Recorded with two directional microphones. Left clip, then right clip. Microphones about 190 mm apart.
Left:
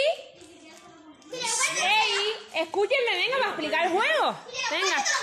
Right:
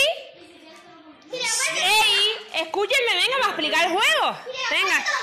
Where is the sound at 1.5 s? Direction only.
Centre (ahead or behind).